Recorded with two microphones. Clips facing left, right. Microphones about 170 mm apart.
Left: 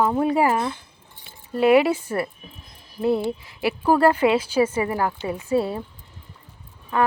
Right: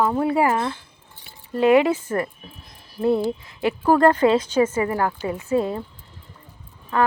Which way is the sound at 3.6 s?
10° left (ahead or behind).